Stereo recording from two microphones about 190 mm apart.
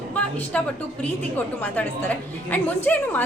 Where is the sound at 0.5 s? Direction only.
5° left (ahead or behind).